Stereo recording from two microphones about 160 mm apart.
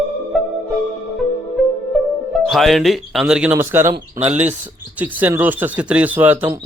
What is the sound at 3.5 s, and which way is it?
Speech, 15° right (ahead or behind).